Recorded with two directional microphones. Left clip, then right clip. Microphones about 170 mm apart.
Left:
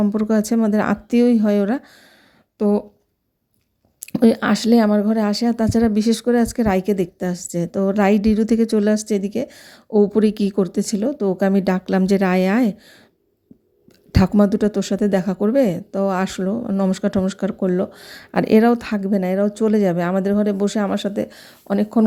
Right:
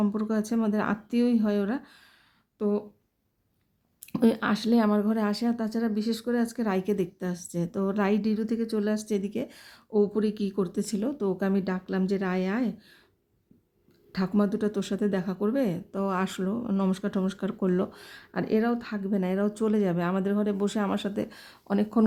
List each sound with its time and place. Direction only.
0.1 s a woman's voice: 30° left (ahead or behind)
4.2 s a woman's voice: 30° left (ahead or behind)
14.1 s speech: 35° left (ahead or behind)
18.2 s speech: 40° left (ahead or behind); by 22.0 s 25° left (ahead or behind)